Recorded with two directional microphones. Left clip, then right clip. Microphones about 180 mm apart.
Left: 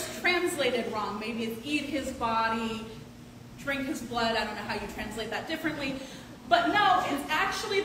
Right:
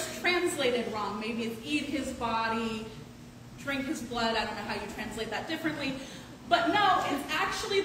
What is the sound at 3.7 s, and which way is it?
A woman's voice, 10° left (ahead or behind).